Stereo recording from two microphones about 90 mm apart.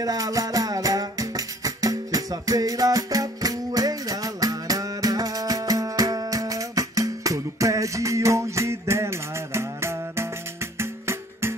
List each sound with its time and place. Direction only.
0.0 s music: 40° right (ahead or behind)